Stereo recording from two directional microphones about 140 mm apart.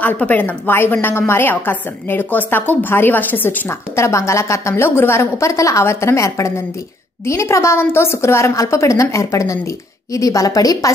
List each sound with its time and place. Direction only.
0.0 s a woman's voice: 10° left (ahead or behind)